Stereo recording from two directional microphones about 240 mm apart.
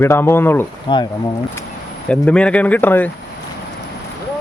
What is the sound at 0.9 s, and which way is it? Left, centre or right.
Speech, left.